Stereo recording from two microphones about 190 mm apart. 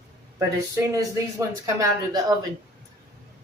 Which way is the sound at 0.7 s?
15° right (ahead or behind).